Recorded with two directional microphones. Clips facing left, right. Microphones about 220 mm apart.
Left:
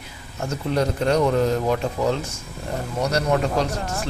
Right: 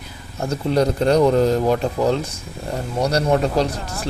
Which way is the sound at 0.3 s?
35° right (ahead or behind).